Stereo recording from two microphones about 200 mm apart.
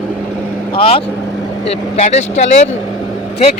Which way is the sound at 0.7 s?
25° left (ahead or behind).